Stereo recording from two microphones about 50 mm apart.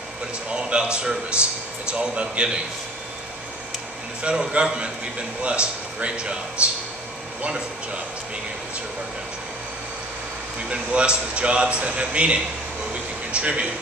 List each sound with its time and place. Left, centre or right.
0.6 s a man's voice: centre
1.9 s a man's voice: right
4.4 s a man's voice: centre
10.7 s a man's voice: right